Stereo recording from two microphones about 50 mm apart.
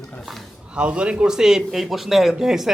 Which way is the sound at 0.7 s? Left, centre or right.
Right.